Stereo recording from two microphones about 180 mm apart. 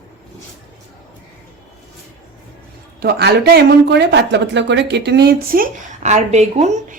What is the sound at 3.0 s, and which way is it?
Speech, 65° right (ahead or behind).